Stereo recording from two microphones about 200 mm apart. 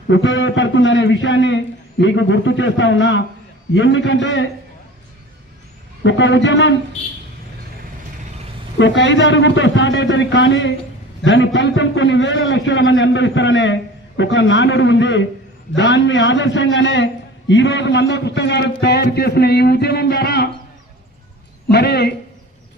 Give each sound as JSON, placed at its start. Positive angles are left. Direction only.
{"t": 0.1, "sound": "a man's voice", "side_deg": 65}
{"t": 6.0, "sound": "a man's voice", "side_deg": 65}
{"t": 8.8, "sound": "a man's voice", "side_deg": 65}
{"t": 21.7, "sound": "a man's voice", "side_deg": 55}